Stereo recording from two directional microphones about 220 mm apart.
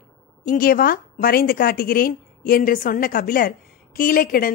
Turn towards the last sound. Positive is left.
turn(degrees=40)  # may be behind; listen again after turning